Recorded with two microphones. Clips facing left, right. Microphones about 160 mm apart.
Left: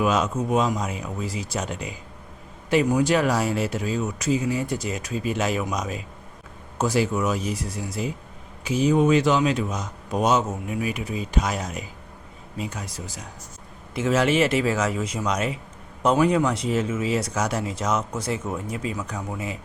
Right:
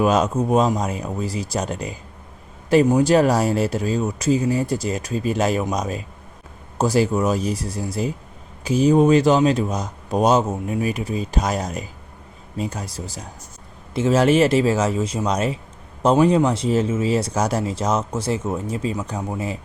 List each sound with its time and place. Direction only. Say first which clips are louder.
0.0 s speech: right 4 dB; 35° right (ahead or behind)